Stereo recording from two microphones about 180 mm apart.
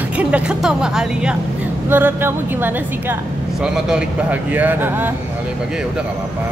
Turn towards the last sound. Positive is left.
turn(degrees=-10)  # may be behind; listen again after turning